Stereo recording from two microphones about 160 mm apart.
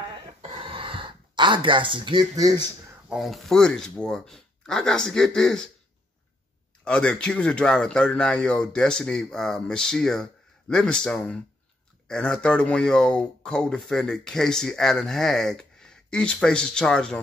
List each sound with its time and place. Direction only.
0.4 s a sound: 35° right (ahead or behind)
3.1 s speech: centre (ahead or behind)
6.8 s speech: 5° left (ahead or behind)